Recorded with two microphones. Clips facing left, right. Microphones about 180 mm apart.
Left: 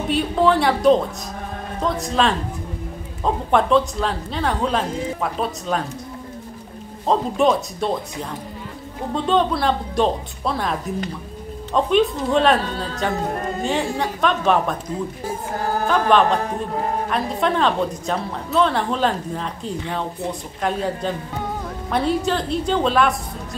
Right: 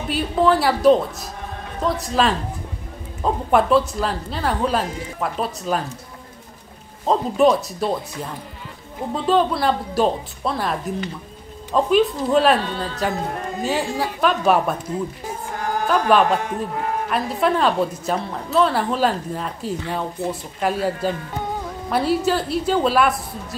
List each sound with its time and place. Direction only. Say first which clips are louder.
0.1 s a woman's voice: even; centre (ahead or behind)
3.5 s a woman's voice: right 1 dB; 5° right (ahead or behind)
7.1 s a woman's voice: right 1 dB; centre (ahead or behind)
15.9 s speech: even; 5° right (ahead or behind)
16.3 s speech: left 1 dB; 35° left (ahead or behind)
17.1 s a woman's voice: right 3 dB; 5° right (ahead or behind)